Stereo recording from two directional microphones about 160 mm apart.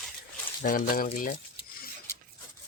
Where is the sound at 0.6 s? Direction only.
60° left (ahead or behind).